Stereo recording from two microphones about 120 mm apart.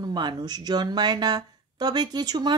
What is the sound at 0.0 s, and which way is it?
Speech, 40° right (ahead or behind).